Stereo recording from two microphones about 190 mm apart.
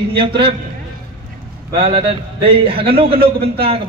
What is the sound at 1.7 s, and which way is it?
A man's voice, 30° right (ahead or behind).